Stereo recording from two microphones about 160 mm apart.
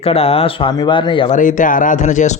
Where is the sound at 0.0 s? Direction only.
40° left (ahead or behind).